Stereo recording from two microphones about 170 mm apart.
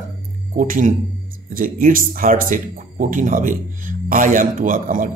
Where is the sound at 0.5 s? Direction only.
50° right (ahead or behind).